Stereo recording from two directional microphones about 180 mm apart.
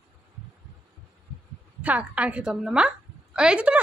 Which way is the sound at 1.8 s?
10° right (ahead or behind).